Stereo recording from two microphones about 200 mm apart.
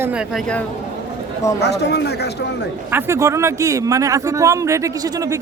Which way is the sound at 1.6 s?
55° left (ahead or behind).